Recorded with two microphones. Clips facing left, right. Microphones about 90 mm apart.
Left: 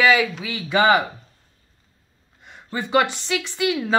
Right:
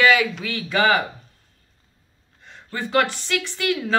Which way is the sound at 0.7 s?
20° left (ahead or behind).